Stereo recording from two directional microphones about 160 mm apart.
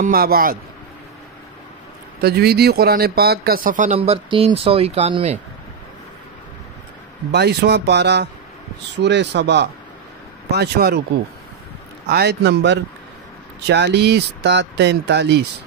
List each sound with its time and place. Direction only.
0.0 s a man's voice: 65° right (ahead or behind)
2.2 s speech: 90° right; by 5.4 s 40° right (ahead or behind)
7.2 s speech: 90° right
12.1 s speech: 90° right